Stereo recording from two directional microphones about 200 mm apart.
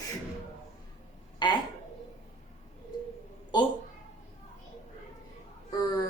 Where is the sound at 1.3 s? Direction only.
20° left (ahead or behind).